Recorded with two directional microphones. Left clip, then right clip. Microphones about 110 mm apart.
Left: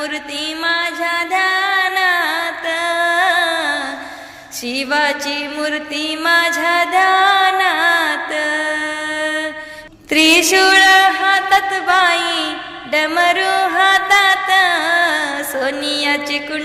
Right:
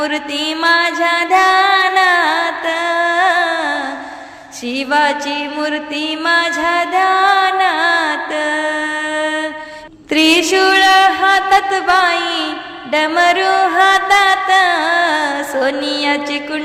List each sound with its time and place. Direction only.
0.0 s music: 60° right (ahead or behind); by 3.8 s 30° right (ahead or behind)
4.7 s a sound: 30° right (ahead or behind)
10.1 s speech: 25° right (ahead or behind)
12.9 s music: 30° right (ahead or behind)